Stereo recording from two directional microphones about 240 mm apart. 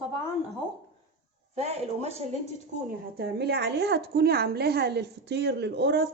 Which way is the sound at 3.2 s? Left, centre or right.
Right.